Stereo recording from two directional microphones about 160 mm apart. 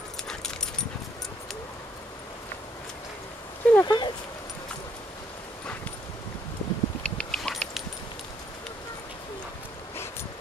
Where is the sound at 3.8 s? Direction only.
20° left (ahead or behind).